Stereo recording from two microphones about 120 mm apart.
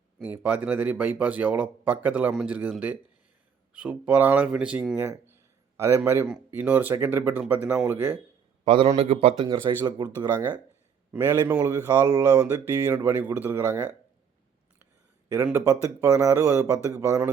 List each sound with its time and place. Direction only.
0.2 s speech: 15° right (ahead or behind)
8.6 s a man's voice: 45° right (ahead or behind)
9.0 s speech: 55° right (ahead or behind)
9.5 s speech: 35° right (ahead or behind)
11.1 s speech: 15° right (ahead or behind)
11.7 s speech: 30° right (ahead or behind)
15.5 s speech: 25° right (ahead or behind)